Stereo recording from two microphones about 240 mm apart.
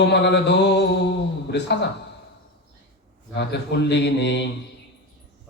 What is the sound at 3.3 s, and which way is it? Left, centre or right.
A man's voice, left.